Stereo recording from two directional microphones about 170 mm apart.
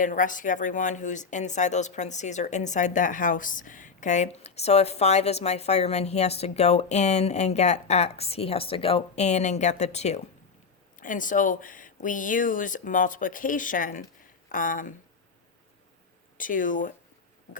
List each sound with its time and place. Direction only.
0.0 s speech: 50° left (ahead or behind)
10.9 s speech: 50° left (ahead or behind)
16.4 s speech: 50° left (ahead or behind)